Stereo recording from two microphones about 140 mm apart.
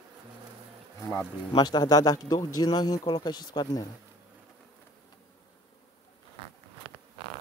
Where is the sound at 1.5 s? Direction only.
30° left (ahead or behind).